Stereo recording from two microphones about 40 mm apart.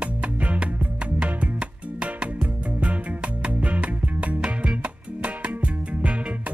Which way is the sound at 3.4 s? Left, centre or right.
Right.